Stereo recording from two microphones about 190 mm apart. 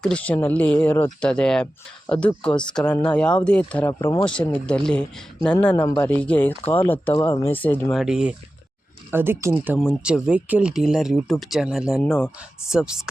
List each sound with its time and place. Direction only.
0.0 s speech: 5° left (ahead or behind)
2.5 s speech: 25° left (ahead or behind)
2.7 s speech: 5° left (ahead or behind)
4.3 s speech: 5° left (ahead or behind)
7.9 s speech: 5° right (ahead or behind)
9.7 s speech: centre (ahead or behind)